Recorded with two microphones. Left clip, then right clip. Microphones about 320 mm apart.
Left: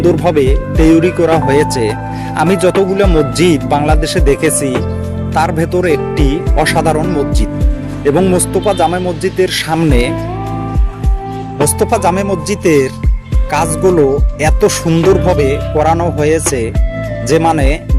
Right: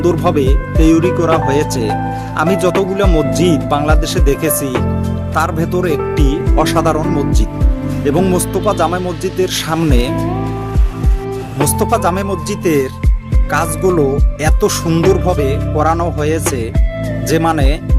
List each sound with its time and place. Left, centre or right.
0.0 s speech: right
8.1 s speech: right
11.6 s music: right